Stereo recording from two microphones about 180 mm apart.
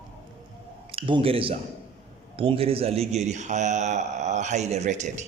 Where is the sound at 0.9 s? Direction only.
30° right (ahead or behind).